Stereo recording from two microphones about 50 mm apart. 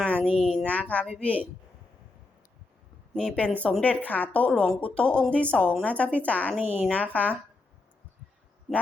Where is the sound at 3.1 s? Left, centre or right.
Centre.